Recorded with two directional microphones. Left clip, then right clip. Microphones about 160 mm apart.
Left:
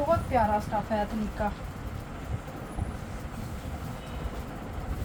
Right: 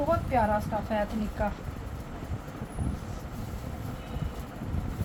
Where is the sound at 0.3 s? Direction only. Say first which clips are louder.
Left 1 dB; 40° right (ahead or behind).